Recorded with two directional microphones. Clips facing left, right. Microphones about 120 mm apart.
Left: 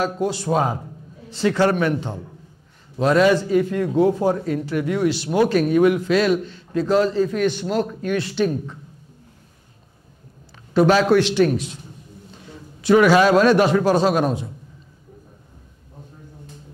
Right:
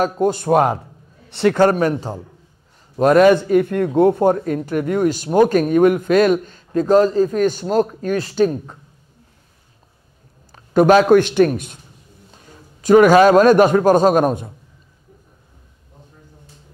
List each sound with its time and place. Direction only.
0.0 s a man's voice: 50° right (ahead or behind)
3.0 s a man's voice: 50° right (ahead or behind)
10.5 s a man's voice: 50° right (ahead or behind)